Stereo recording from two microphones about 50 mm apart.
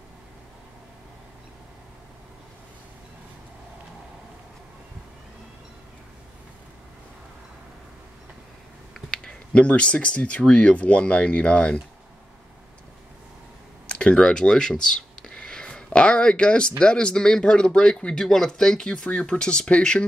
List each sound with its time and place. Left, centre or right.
9.1 s speech: centre
13.8 s a sound: centre
16.8 s speech: centre